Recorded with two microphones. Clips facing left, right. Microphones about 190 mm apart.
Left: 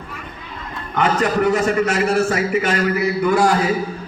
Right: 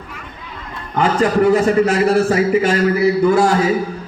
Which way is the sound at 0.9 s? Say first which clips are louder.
Right 3 dB; 30° right (ahead or behind).